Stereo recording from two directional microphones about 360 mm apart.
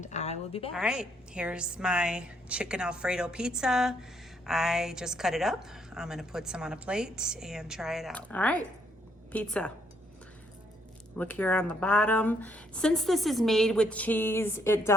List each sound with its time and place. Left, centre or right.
0.0 s a woman's voice: centre
0.7 s a woman's voice: centre
11.2 s a woman's voice: centre